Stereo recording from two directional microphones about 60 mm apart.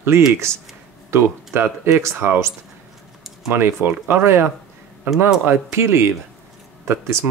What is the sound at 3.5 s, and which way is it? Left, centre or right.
Speech, right.